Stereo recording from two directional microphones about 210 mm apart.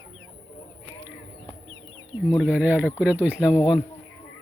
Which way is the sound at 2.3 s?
5° right (ahead or behind).